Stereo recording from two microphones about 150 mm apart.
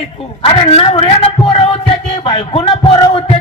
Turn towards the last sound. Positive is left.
turn(degrees=30)  # may be behind; listen again after turning